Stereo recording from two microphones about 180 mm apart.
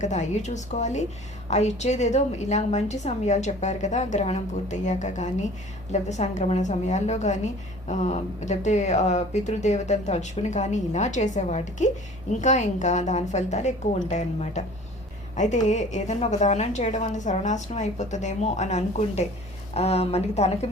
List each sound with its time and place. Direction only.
0.0 s a woman's voice: 40° left (ahead or behind)